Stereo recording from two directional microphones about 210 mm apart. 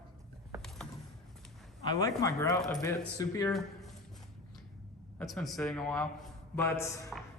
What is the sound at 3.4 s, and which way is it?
Speech, centre (ahead or behind).